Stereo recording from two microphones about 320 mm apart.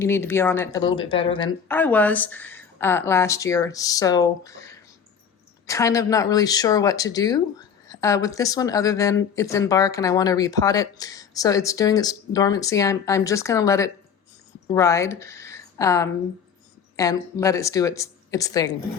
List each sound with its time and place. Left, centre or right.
0.0 s speech: centre
1.6 s speech: centre